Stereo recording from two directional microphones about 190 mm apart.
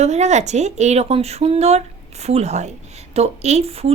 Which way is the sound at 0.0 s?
35° right (ahead or behind).